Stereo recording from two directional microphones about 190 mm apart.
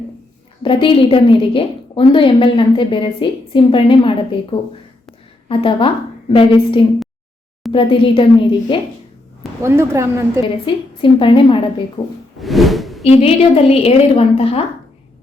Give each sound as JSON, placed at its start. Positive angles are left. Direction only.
{"t": 0.6, "sound": "a woman's voice", "side_deg": 25}
{"t": 5.5, "sound": "a woman's voice", "side_deg": 30}
{"t": 9.6, "sound": "a woman's voice", "side_deg": -15}
{"t": 10.7, "sound": "a woman's voice", "side_deg": 25}
{"t": 12.4, "sound": "whoosh", "side_deg": 0}
{"t": 13.1, "sound": "a woman's voice", "side_deg": 30}